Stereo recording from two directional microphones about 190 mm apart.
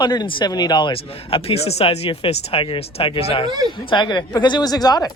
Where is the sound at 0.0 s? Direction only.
20° left (ahead or behind).